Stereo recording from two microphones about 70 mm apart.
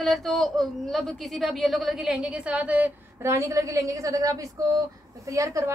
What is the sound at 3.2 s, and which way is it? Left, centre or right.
A woman's voice, right.